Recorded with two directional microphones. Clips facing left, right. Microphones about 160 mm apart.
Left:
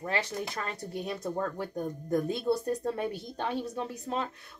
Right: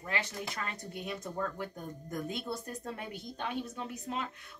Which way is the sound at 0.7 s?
35° left (ahead or behind).